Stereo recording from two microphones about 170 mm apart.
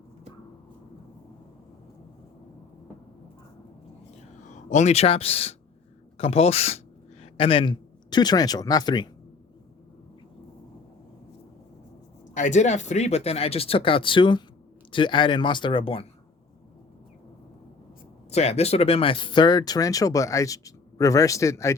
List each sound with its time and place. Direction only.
4.4 s speech: 45° left (ahead or behind); by 9.0 s 25° left (ahead or behind)
12.3 s speech: 45° left (ahead or behind)
18.3 s speech: 40° left (ahead or behind); by 21.8 s 15° left (ahead or behind)